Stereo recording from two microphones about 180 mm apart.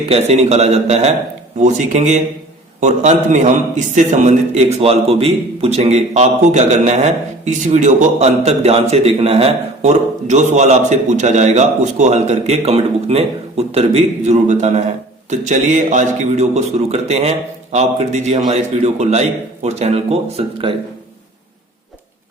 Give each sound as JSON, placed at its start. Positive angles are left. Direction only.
{"t": 0.1, "sound": "a man's voice", "side_deg": -35}